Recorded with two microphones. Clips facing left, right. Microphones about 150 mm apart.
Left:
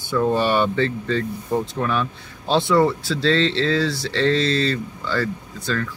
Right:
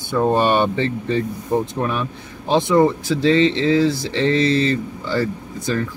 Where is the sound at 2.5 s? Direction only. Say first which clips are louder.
Right 2 dB; 15° right (ahead or behind).